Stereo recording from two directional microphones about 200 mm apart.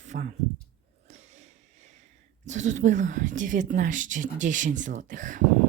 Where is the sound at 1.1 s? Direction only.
35° right (ahead or behind).